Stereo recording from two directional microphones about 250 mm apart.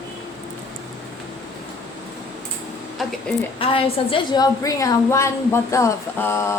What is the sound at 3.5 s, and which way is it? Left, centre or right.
A woman's voice, left.